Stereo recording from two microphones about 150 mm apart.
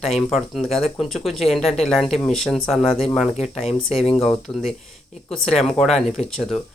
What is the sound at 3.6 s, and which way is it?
Speech, 45° left (ahead or behind).